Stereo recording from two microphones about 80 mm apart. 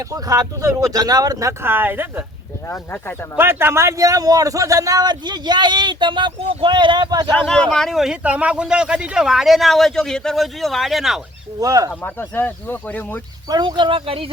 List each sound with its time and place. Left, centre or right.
0.1 s a man's voice: right
1.6 s speech: right
2.6 s speech: left
3.3 s a man's voice: right
7.3 s speech: centre
8.2 s speech: centre
11.6 s a man's voice: right
12.0 s speech: left
13.5 s speech: right